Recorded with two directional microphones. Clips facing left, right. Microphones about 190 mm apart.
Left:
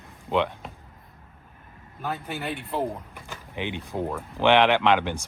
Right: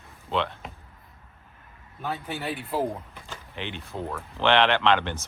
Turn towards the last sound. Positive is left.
turn(degrees=10)  # may be behind; listen again after turning